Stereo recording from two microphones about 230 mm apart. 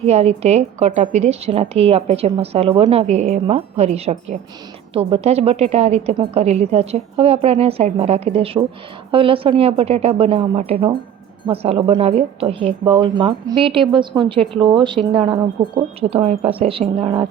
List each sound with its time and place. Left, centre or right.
0.0 s a woman's voice: right